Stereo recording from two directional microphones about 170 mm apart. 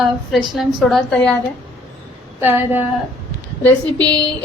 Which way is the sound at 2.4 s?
10° right (ahead or behind).